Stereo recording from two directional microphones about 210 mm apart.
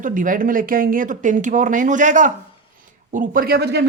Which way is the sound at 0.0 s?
40° right (ahead or behind).